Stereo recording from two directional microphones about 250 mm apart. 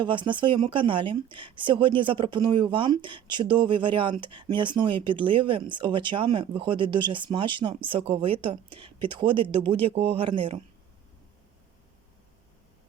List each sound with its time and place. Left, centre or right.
0.0 s speech: centre